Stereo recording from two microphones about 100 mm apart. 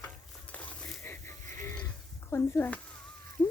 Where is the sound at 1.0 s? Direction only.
25° left (ahead or behind).